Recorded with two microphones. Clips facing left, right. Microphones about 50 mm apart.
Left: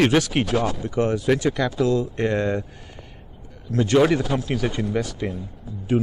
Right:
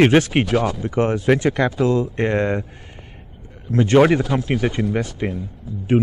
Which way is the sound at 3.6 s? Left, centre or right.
Right.